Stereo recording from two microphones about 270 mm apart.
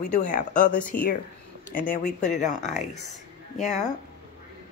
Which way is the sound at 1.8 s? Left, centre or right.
Left.